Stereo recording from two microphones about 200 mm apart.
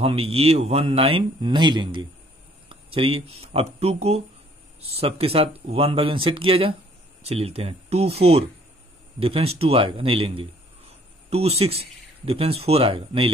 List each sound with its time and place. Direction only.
0.0 s speech: 30° right (ahead or behind)
2.7 s a sound: 25° right (ahead or behind)
3.3 s speech: 30° right (ahead or behind)